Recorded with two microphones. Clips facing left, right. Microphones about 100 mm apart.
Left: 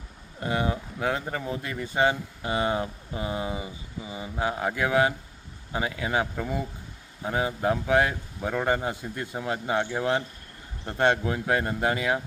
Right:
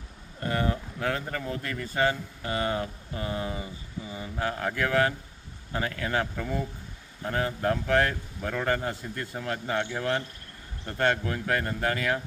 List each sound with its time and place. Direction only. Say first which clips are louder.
0.3 s speech: left 1 dB; 15° left (ahead or behind)